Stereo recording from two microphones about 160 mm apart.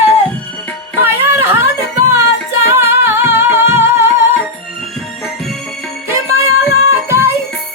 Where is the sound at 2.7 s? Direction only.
15° right (ahead or behind).